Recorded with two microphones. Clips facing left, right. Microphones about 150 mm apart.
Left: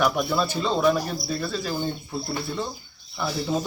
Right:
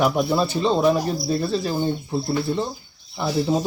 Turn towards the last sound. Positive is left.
turn(degrees=-25)  # may be behind; listen again after turning